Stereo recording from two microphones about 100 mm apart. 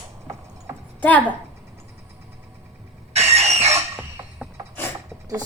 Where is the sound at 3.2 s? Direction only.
90° right.